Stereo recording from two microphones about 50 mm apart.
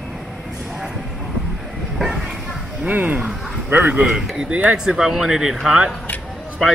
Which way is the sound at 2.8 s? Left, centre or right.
Right.